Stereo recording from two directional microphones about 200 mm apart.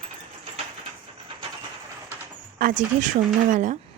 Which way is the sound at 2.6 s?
40° right (ahead or behind).